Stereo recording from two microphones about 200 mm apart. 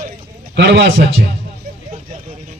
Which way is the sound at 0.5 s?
60° right (ahead or behind).